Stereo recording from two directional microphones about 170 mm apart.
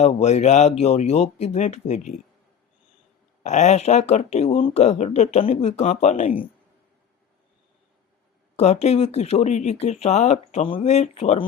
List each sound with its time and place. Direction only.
0.0 s speech: 40° left (ahead or behind)
3.4 s speech: 40° left (ahead or behind)
8.5 s speech: 40° left (ahead or behind)